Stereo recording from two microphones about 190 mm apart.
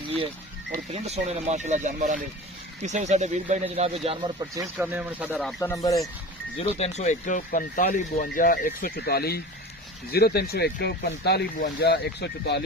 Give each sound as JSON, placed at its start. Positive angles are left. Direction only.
{"t": 0.9, "sound": "speech", "side_deg": -35}
{"t": 4.4, "sound": "speech", "side_deg": -15}
{"t": 5.5, "sound": "speech", "side_deg": 15}
{"t": 6.6, "sound": "speech", "side_deg": 35}